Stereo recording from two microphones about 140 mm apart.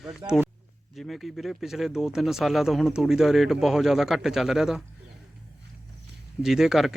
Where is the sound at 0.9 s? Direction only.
Centre (ahead or behind).